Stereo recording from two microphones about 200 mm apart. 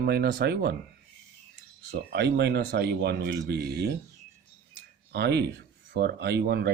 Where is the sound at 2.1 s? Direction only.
55° right (ahead or behind).